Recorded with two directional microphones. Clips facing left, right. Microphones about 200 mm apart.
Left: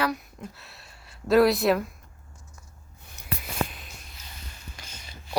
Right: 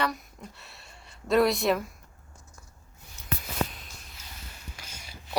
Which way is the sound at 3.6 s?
75° left (ahead or behind).